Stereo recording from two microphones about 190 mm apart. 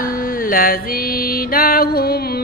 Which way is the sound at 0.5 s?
50° left (ahead or behind).